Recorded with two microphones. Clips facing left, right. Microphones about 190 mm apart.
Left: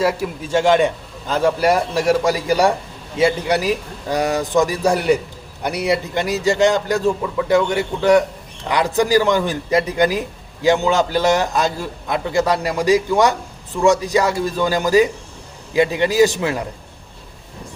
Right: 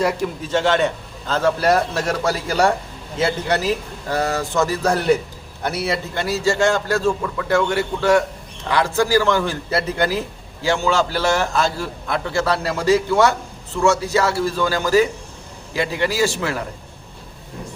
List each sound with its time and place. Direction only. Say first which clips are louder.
0.0 s a man's voice: left 1 dB; 10° left (ahead or behind)